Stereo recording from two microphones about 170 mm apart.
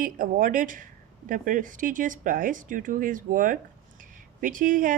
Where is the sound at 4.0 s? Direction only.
50° right (ahead or behind).